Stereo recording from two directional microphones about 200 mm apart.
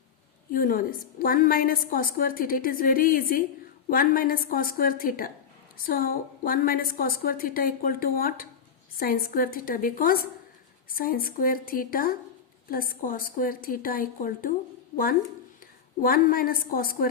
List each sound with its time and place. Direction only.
0.5 s a woman's voice: 45° left (ahead or behind)
16.0 s a woman's voice: 45° left (ahead or behind)